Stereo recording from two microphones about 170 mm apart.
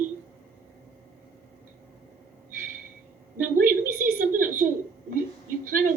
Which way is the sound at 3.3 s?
55° right (ahead or behind).